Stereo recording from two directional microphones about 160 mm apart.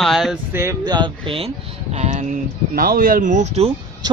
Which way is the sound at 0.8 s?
30° right (ahead or behind).